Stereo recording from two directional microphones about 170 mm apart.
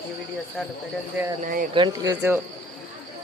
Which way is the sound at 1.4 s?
55° right (ahead or behind).